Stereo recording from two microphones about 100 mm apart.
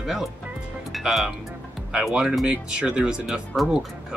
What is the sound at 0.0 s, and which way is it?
Speech, 5° right (ahead or behind).